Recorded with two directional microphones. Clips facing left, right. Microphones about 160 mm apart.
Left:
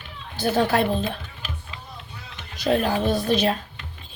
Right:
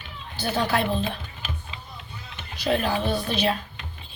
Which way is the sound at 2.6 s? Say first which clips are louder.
Left 3 dB; 45° left (ahead or behind).